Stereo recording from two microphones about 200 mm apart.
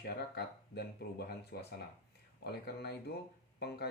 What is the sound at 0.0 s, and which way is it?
Speech, 55° left (ahead or behind).